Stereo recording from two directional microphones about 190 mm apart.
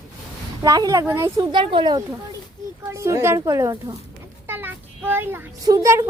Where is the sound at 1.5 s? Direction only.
25° right (ahead or behind).